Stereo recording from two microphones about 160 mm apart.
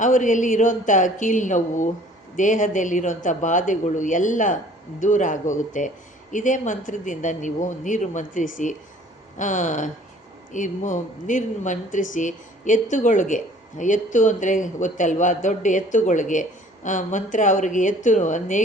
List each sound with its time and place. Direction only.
0.0 s speech: 50° left (ahead or behind)